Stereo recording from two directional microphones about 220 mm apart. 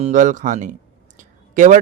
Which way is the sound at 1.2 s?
35° right (ahead or behind).